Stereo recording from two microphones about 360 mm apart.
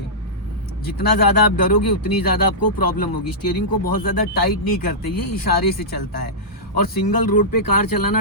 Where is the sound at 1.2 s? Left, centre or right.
Left.